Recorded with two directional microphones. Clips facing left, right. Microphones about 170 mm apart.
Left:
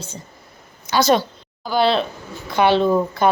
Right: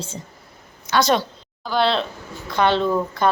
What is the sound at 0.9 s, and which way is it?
A woman's voice, centre (ahead or behind).